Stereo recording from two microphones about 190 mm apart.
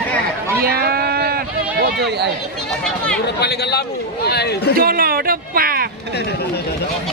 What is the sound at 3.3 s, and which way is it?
A man's voice, 60° left (ahead or behind).